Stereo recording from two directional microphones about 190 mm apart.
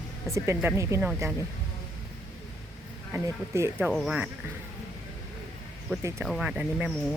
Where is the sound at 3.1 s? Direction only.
15° right (ahead or behind).